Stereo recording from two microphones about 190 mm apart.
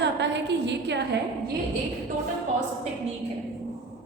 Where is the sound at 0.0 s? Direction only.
65° right (ahead or behind).